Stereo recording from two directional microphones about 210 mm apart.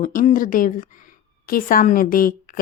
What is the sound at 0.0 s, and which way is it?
A woman's voice, 40° left (ahead or behind).